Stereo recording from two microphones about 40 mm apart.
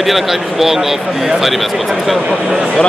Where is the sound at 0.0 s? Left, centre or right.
Centre.